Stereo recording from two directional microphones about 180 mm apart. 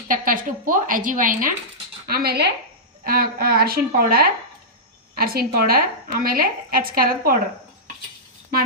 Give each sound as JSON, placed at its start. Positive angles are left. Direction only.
{"t": 0.1, "sound": "a woman's voice", "side_deg": -50}